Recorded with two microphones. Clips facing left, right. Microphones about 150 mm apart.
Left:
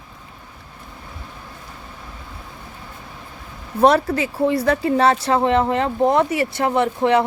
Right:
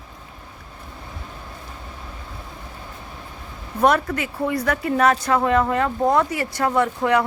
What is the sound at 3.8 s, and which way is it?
Speech, 30° left (ahead or behind).